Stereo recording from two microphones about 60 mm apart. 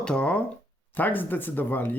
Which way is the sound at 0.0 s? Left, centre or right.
Centre.